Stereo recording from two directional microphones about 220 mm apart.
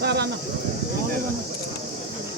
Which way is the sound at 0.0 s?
50° right (ahead or behind).